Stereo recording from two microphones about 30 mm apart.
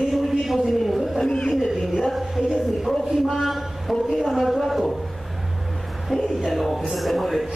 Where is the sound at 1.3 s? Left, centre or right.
Left.